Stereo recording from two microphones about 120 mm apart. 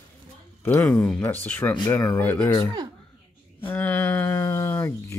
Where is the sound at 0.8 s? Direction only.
5° left (ahead or behind).